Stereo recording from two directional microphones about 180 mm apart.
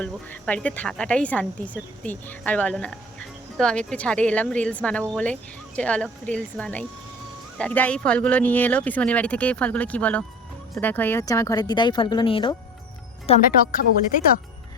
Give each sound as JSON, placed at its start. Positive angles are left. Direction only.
{"t": 0.0, "sound": "speech", "side_deg": 5}